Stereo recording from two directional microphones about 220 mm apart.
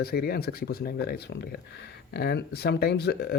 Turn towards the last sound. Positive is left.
turn(degrees=45)  # may be behind; listen again after turning